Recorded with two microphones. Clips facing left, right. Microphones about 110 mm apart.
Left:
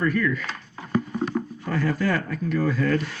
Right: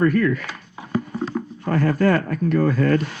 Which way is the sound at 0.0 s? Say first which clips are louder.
Right 5 dB; 50° right (ahead or behind).